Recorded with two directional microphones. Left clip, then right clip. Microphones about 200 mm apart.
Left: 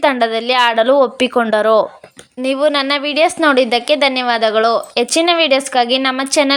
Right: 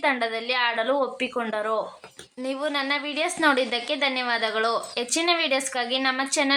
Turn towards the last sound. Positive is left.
turn(degrees=40)  # may be behind; listen again after turning